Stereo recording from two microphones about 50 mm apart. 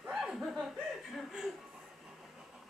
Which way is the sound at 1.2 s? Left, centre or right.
Centre.